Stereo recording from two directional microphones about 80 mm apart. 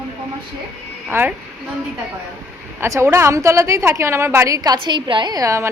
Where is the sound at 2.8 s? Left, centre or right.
Right.